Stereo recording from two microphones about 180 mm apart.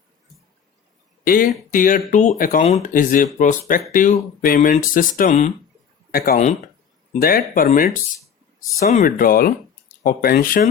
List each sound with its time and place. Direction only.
1.2 s speech: 50° left (ahead or behind)
2.6 s speech: 35° left (ahead or behind); by 10.7 s 55° left (ahead or behind)